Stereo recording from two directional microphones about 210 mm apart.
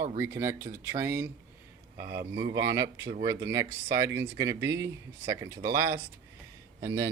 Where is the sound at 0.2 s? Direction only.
15° right (ahead or behind).